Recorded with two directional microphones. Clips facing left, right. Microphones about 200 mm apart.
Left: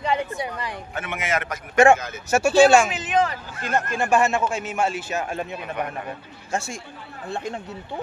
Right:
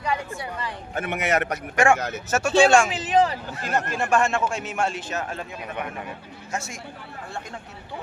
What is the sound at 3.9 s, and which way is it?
Speech, centre (ahead or behind).